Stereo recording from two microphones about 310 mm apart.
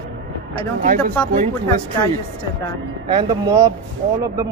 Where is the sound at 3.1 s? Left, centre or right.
Centre.